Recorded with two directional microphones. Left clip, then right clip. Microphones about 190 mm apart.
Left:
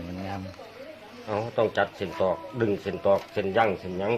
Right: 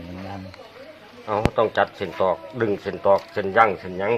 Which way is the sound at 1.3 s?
5° left (ahead or behind).